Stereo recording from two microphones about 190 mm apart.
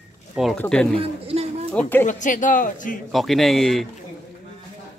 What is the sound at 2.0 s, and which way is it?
Speech, 40° left (ahead or behind).